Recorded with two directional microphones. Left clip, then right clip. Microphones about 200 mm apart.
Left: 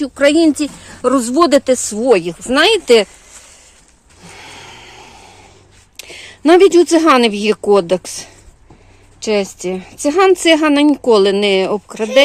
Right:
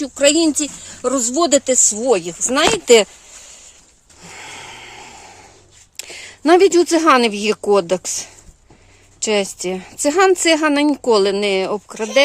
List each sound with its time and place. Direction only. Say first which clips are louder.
0.0 s speech: left 3 dB; 5° right (ahead or behind)
1.0 s speech: left 5 dB; centre (ahead or behind); by 3.1 s 15° right (ahead or behind)
4.2 s snoring: right 1 dB; 20° right (ahead or behind)
6.0 s speech: left 4 dB; 10° right (ahead or behind)
9.2 s speech: left 2 dB; 10° right (ahead or behind)